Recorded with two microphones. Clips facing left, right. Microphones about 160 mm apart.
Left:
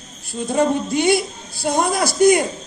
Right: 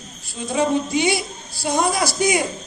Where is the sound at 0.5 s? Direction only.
55° left (ahead or behind).